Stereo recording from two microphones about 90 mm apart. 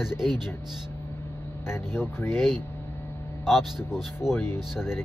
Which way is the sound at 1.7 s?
25° left (ahead or behind).